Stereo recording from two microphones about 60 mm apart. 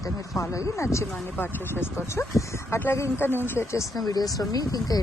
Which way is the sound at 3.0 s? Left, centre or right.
Left.